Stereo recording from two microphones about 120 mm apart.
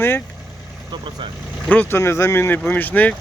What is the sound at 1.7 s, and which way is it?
Speech, 15° left (ahead or behind).